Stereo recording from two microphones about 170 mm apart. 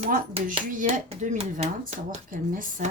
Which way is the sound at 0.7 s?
50° right (ahead or behind).